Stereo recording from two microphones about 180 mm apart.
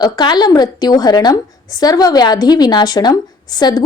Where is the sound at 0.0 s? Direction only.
25° left (ahead or behind).